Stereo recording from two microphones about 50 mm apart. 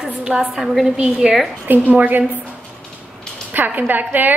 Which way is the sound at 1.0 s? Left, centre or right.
Centre.